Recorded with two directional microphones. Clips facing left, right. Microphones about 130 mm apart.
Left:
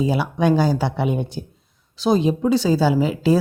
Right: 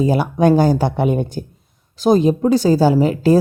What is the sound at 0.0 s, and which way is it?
Speech, 45° right (ahead or behind).